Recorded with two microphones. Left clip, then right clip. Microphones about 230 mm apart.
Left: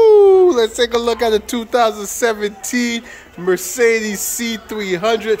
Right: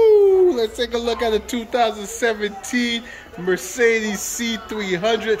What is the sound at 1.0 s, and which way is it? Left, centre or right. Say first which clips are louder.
Speech: left 5 dB; centre.